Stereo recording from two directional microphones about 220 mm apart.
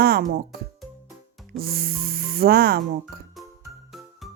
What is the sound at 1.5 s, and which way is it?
Speech, 45° right (ahead or behind).